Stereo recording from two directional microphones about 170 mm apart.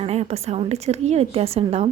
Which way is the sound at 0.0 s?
40° right (ahead or behind).